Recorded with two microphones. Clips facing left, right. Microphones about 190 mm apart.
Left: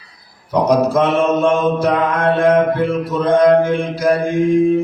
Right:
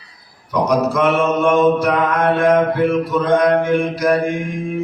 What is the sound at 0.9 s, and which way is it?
Mantra, 30° left (ahead or behind).